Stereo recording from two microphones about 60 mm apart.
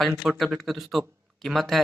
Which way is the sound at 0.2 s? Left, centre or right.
Centre.